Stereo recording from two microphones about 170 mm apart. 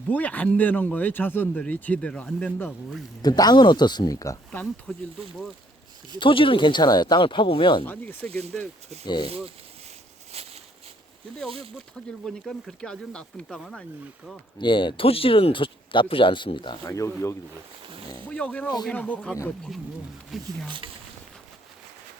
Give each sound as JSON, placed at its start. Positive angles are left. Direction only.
{"t": 0.1, "sound": "speech", "side_deg": 10}
{"t": 3.2, "sound": "speech", "side_deg": 25}
{"t": 4.9, "sound": "speech", "side_deg": 5}
{"t": 6.1, "sound": "speech", "side_deg": 30}
{"t": 7.9, "sound": "speech", "side_deg": 10}
{"t": 8.3, "sound": "speech", "side_deg": -40}
{"t": 10.3, "sound": "a sound", "side_deg": -35}
{"t": 11.4, "sound": "speech", "side_deg": -35}
{"t": 12.2, "sound": "speech", "side_deg": 5}
{"t": 14.6, "sound": "speech", "side_deg": 30}
{"t": 18.3, "sound": "speech", "side_deg": 5}
{"t": 20.7, "sound": "speech", "side_deg": -30}